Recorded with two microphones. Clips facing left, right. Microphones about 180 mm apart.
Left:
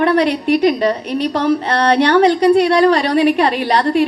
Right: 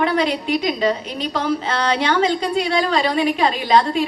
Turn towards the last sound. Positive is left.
turn(degrees=65)  # may be behind; listen again after turning